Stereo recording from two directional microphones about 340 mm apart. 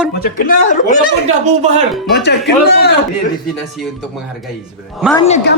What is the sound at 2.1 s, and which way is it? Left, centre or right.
Speech, left.